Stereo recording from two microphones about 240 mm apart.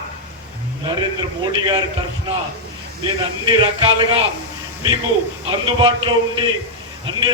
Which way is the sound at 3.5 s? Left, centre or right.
Centre.